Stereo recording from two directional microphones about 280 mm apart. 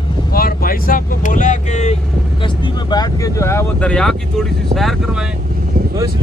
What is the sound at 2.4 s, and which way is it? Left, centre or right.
Speech, centre.